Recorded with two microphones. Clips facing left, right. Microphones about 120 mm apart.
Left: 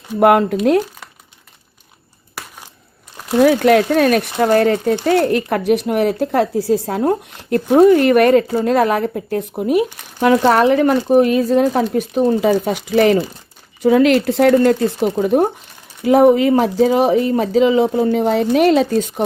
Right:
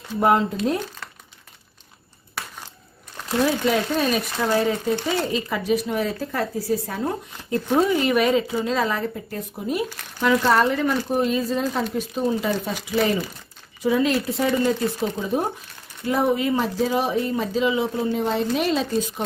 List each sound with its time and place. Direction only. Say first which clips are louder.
0.2 s speech: left 7 dB; 70° left (ahead or behind)
3.4 s speech: left 10 dB; 70° left (ahead or behind)